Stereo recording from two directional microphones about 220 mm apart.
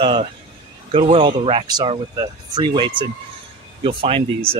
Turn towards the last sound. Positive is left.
turn(degrees=-25)  # may be behind; listen again after turning